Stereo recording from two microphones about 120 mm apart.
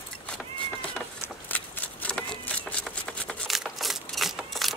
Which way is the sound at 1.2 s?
15° left (ahead or behind).